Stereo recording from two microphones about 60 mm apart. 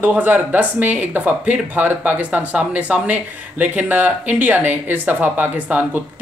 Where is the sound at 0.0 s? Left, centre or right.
Right.